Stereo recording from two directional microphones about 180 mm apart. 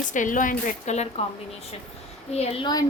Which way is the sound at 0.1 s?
45° left (ahead or behind).